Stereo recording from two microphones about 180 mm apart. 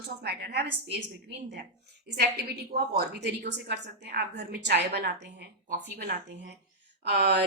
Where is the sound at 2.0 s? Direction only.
65° right (ahead or behind).